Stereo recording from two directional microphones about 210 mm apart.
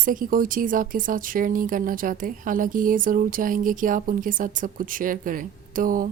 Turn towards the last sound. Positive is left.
turn(degrees=-40)  # may be behind; listen again after turning